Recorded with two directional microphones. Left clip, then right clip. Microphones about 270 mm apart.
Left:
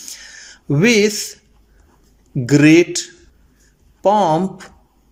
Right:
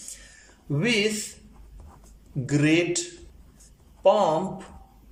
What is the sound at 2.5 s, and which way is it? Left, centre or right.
Speech, left.